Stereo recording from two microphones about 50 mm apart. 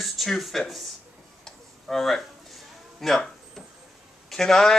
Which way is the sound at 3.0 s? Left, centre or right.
Centre.